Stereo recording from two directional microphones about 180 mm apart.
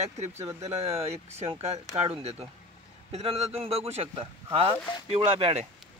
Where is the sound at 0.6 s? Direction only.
35° right (ahead or behind).